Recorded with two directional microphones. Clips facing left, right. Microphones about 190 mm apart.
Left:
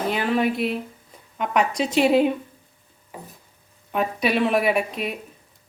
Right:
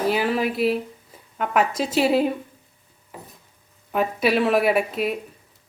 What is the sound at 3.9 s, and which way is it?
Speech, centre (ahead or behind).